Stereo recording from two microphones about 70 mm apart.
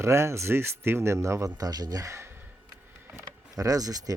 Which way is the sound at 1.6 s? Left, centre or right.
Right.